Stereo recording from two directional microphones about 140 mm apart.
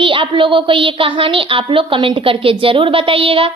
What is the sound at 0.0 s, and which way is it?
A child's voice, 40° right (ahead or behind).